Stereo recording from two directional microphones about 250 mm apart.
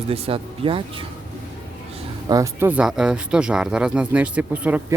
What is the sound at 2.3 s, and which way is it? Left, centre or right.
Speech, centre.